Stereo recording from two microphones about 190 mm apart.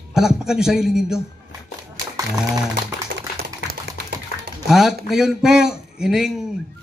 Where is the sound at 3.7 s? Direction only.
55° right (ahead or behind).